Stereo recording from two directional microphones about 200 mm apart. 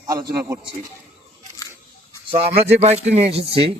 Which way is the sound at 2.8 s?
30° right (ahead or behind).